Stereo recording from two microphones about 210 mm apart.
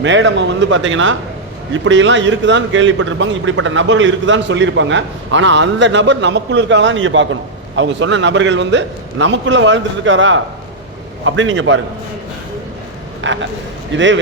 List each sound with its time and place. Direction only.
0.0 s a man's voice: 60° right (ahead or behind)
13.2 s a man's voice: 65° right (ahead or behind)